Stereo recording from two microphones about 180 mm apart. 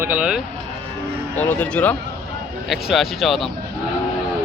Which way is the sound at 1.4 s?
10° left (ahead or behind).